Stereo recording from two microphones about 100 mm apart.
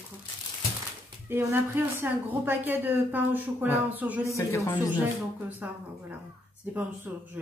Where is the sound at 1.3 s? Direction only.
20° right (ahead or behind).